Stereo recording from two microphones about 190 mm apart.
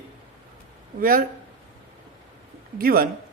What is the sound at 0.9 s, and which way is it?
Speech, 45° right (ahead or behind).